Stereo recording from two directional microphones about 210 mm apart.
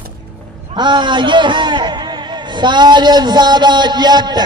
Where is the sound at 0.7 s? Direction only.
20° right (ahead or behind).